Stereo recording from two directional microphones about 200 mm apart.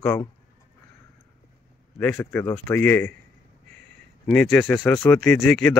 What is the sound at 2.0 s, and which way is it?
Speech, 10° left (ahead or behind).